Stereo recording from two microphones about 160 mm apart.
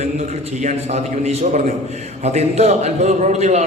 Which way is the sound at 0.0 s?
45° right (ahead or behind).